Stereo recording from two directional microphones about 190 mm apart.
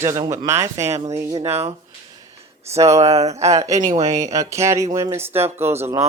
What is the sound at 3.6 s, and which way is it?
Speech, 15° right (ahead or behind).